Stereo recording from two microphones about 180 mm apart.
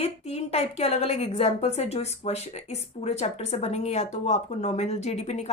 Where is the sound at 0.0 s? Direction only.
35° left (ahead or behind).